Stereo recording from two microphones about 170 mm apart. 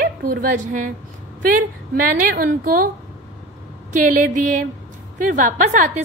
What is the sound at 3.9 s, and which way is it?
A woman's voice, 50° right (ahead or behind).